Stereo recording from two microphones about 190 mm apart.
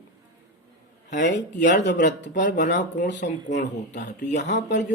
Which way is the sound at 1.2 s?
65° left (ahead or behind).